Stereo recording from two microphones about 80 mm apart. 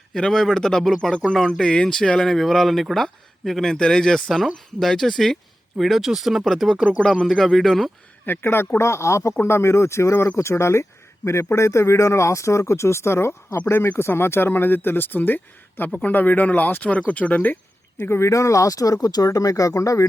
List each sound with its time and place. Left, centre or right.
0.1 s speech: centre
8.3 s speech: left
18.0 s speech: left